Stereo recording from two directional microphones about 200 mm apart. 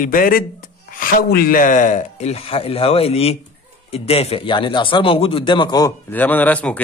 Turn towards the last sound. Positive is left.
turn(degrees=5)  # may be behind; listen again after turning